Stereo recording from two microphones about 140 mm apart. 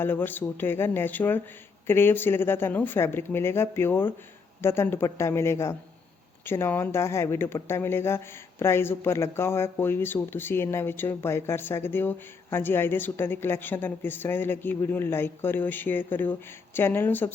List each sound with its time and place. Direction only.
0.0 s speech: 15° left (ahead or behind)